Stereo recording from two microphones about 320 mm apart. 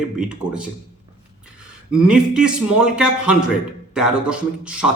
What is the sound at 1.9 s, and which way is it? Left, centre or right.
A man's voice, centre.